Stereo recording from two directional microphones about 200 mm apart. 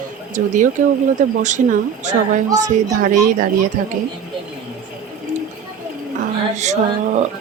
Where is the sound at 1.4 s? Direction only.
35° right (ahead or behind).